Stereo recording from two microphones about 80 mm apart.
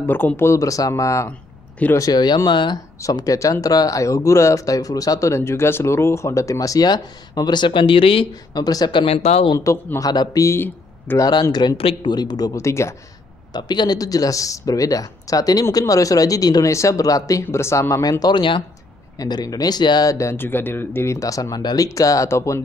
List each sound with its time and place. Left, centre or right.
0.0 s speech: left
0.4 s speech: left
2.0 s speech: left
3.0 s speech: left
3.6 s speech: left
8.5 s speech: left
9.9 s speech: left
11.1 s speech: left
11.5 s speech: left
12.5 s speech: left
13.5 s speech: left
17.4 s speech: left
20.1 s speech: left
20.3 s speech: left